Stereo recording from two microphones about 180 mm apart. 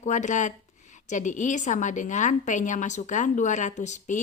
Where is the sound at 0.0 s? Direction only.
40° left (ahead or behind).